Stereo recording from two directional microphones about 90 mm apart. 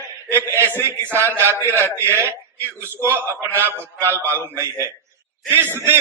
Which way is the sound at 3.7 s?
20° left (ahead or behind).